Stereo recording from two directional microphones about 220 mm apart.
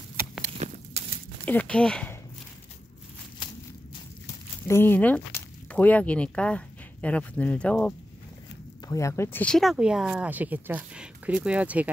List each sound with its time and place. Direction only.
0.6 s walk: 30° right (ahead or behind)
1.4 s speech: 5° left (ahead or behind)
4.6 s speech: 10° left (ahead or behind); by 11.9 s 5° right (ahead or behind)